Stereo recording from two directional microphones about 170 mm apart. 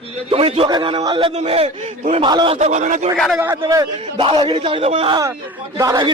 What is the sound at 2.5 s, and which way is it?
Speech, 45° right (ahead or behind).